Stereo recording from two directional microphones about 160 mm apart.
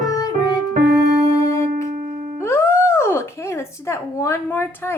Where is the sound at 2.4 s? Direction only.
15° left (ahead or behind).